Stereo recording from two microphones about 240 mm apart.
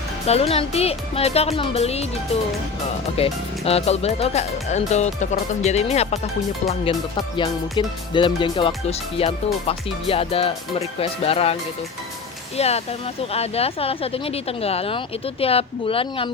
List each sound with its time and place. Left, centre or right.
0.3 s speech: left
7.3 s speech: centre
12.5 s speech: left